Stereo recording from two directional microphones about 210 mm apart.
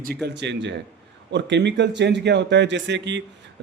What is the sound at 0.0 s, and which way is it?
Speech, 50° right (ahead or behind).